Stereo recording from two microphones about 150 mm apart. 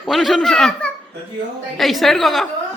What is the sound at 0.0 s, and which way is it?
A woman's voice, centre (ahead or behind).